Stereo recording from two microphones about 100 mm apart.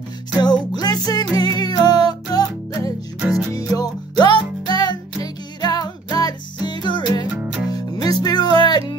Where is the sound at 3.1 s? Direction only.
10° right (ahead or behind).